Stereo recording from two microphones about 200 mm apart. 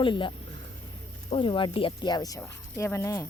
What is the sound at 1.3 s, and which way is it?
Speech, 25° left (ahead or behind).